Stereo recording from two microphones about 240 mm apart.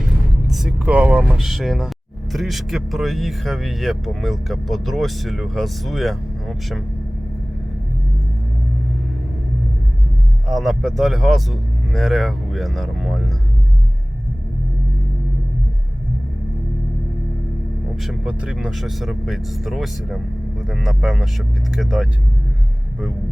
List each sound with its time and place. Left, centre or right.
0.0 s speech: centre
10.5 s speech: centre
18.0 s speech: centre